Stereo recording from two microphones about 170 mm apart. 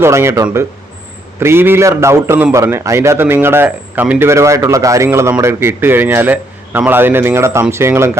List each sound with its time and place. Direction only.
0.0 s a man's voice: 15° right (ahead or behind)